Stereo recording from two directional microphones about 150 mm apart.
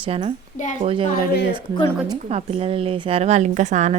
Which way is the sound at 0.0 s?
40° right (ahead or behind).